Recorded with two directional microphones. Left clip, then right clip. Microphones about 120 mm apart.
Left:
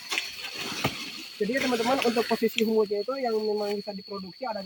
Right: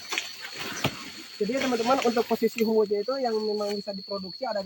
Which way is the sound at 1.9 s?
25° left (ahead or behind).